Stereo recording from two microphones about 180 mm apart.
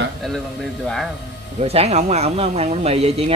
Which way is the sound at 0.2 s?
Centre (ahead or behind).